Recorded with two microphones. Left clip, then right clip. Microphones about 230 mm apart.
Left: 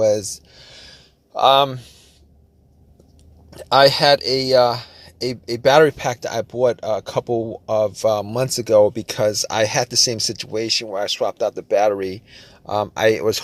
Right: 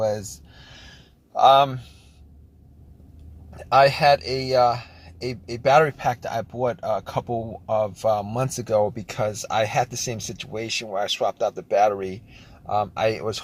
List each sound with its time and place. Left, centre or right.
0.1 s a sound: left
1.3 s speech: left
3.5 s speech: left